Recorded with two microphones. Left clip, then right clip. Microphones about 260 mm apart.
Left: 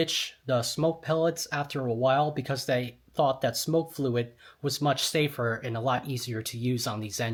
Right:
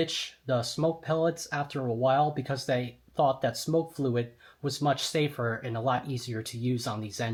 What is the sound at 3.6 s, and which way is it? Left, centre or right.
Speech, left.